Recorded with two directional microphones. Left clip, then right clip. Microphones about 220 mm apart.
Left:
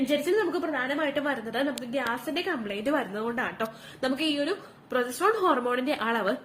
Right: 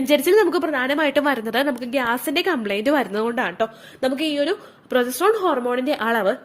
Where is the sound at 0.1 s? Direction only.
50° right (ahead or behind).